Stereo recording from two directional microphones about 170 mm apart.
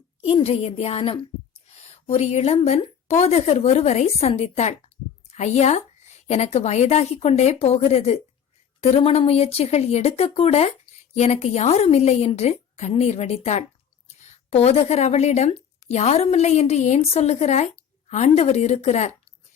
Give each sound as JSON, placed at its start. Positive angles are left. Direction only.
{"t": 0.2, "sound": "a woman's voice", "side_deg": 35}